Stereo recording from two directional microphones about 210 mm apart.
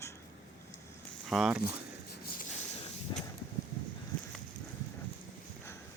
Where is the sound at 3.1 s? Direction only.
20° left (ahead or behind).